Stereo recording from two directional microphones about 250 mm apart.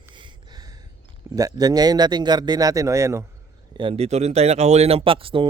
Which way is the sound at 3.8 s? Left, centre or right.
Right.